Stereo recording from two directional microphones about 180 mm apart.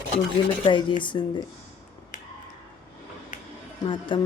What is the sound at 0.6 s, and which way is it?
Speech, 25° left (ahead or behind).